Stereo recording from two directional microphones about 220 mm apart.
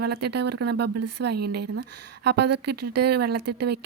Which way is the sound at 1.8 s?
90° right.